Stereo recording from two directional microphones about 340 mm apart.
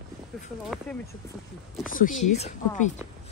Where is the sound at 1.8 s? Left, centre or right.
Left.